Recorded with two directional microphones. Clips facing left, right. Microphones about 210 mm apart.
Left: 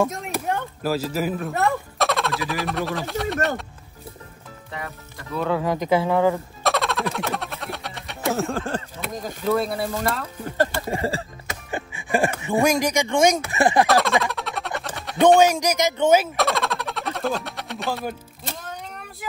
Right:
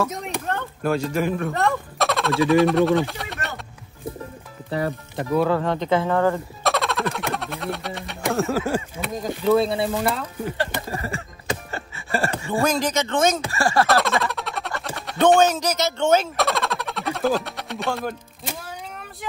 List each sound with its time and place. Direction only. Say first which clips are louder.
0.1 s speech: left 1 dB; centre (ahead or behind)
4.6 s speech: right 10 dB; 35° right (ahead or behind)
5.5 s speech: right 1 dB; 5° left (ahead or behind)
5.8 s a sound: left 1 dB; 10° left (ahead or behind)
8.3 s speech: right 2 dB; centre (ahead or behind)
10.9 s a sound: left 4 dB; 30° left (ahead or behind)
11.7 s speech: left 8 dB; 15° left (ahead or behind)
13.8 s a sound: left 1 dB; centre (ahead or behind)
15.4 s speech: left 1 dB; 10° left (ahead or behind)
18.5 s music: even; 10° right (ahead or behind)